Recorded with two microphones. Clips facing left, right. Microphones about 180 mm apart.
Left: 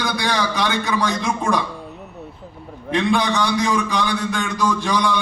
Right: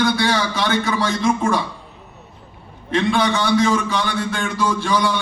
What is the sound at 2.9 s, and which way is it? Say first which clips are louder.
A man's voice: right 1 dB; 15° left (ahead or behind).